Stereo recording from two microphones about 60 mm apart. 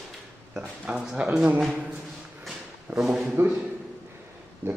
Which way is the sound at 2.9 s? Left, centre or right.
Right.